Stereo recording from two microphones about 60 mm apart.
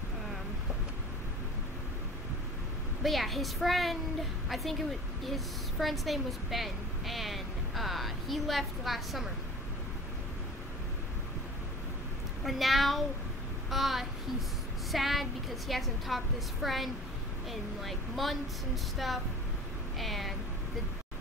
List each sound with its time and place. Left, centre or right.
3.0 s a woman's voice: centre
5.2 s a woman's voice: centre
12.4 s a woman's voice: centre